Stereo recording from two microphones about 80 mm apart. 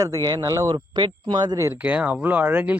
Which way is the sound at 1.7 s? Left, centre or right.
Centre.